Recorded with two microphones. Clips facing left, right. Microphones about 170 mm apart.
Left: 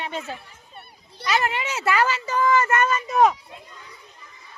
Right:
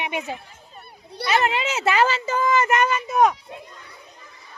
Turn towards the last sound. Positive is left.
turn(degrees=0)  # may be behind; listen again after turning